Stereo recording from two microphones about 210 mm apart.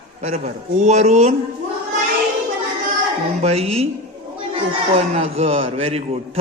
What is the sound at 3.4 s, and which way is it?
A man's voice, 30° right (ahead or behind).